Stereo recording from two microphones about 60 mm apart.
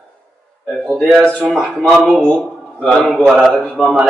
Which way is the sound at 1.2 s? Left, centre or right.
Left.